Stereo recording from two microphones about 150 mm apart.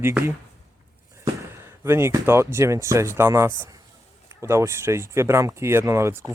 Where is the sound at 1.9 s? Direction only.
15° right (ahead or behind).